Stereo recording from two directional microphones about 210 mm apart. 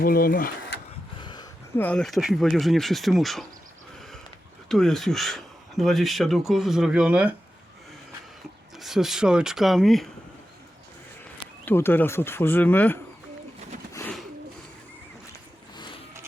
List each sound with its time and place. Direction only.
0.0 s speech: 45° left (ahead or behind)
1.2 s speech: 20° left (ahead or behind); by 3.4 s centre (ahead or behind)
4.7 s speech: centre (ahead or behind)
8.8 s speech: centre (ahead or behind)
11.6 s speech: 10° left (ahead or behind)
13.9 s pigeon: 10° left (ahead or behind)
15.3 s zipper: 20° left (ahead or behind)